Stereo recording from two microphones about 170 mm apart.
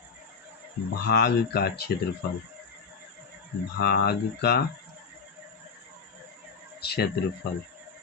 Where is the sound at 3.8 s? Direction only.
65° left (ahead or behind).